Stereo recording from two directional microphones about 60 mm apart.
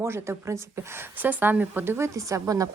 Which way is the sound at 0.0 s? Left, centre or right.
Right.